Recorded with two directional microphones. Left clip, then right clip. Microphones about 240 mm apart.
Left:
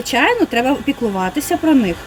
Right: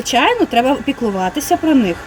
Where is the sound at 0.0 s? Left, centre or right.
Centre.